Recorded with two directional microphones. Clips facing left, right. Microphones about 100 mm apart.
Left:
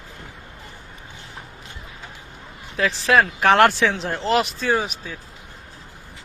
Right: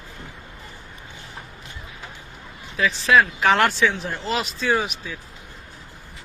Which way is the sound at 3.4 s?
60° left (ahead or behind).